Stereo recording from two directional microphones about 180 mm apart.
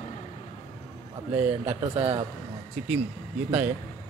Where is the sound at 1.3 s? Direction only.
30° right (ahead or behind).